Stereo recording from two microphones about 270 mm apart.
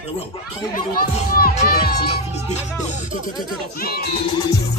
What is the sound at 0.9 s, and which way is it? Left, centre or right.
Speech, left.